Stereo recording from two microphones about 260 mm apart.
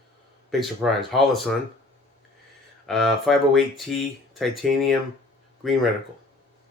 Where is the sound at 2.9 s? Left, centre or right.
Centre.